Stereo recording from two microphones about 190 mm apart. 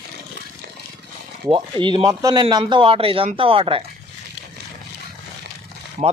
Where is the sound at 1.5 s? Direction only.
25° right (ahead or behind).